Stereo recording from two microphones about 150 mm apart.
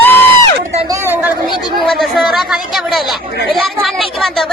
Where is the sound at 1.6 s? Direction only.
Centre (ahead or behind).